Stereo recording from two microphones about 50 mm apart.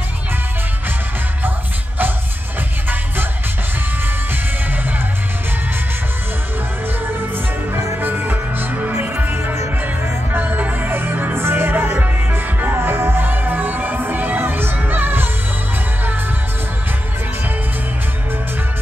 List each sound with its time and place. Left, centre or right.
8.0 s music: right
10.3 s music: right
11.3 s music: right